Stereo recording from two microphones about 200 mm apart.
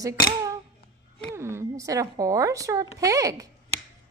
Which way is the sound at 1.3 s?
15° right (ahead or behind).